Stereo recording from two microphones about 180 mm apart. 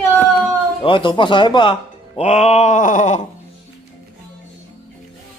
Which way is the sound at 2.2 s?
35° left (ahead or behind).